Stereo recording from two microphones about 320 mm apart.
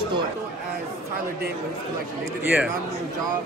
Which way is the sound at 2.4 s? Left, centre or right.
Centre.